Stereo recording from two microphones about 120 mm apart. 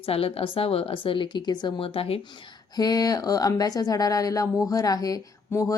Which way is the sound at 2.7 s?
30° left (ahead or behind).